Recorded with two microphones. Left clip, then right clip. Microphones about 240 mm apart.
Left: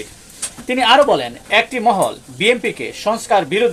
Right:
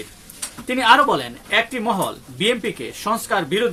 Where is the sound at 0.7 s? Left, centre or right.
Centre.